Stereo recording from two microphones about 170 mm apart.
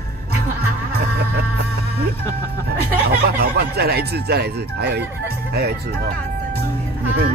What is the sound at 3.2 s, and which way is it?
Music, 65° right (ahead or behind).